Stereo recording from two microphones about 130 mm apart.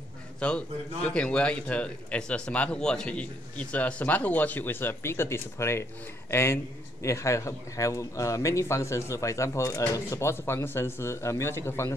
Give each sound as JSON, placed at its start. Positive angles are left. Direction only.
{"t": 0.4, "sound": "a man's voice", "side_deg": 10}